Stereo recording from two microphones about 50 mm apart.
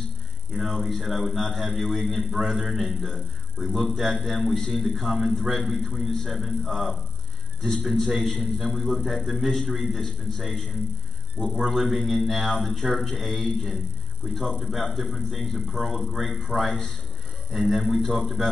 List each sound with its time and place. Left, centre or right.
0.5 s a man's voice: centre
11.3 s a man's voice: centre
11.6 s a man's voice: centre